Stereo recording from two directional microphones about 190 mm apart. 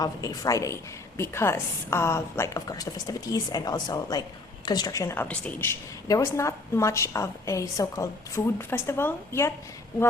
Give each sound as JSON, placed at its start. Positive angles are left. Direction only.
{"t": 0.0, "sound": "a woman's voice", "side_deg": 20}